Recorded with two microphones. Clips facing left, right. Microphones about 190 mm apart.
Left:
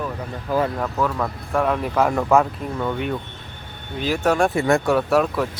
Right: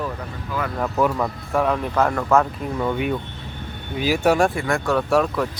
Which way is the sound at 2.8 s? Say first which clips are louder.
Right 2 dB; 5° right (ahead or behind).